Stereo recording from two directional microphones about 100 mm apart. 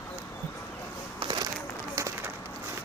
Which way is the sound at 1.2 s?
65° right (ahead or behind).